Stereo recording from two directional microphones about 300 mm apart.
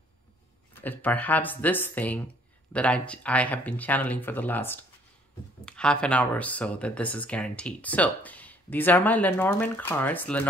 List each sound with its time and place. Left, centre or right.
0.7 s speech: centre